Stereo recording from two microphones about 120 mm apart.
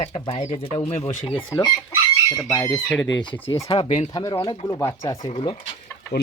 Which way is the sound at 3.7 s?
50° left (ahead or behind).